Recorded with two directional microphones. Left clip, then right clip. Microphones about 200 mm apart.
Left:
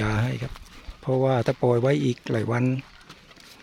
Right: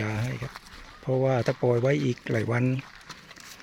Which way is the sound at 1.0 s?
10° left (ahead or behind).